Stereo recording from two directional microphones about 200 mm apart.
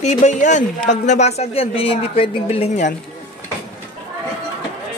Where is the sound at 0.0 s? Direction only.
35° left (ahead or behind).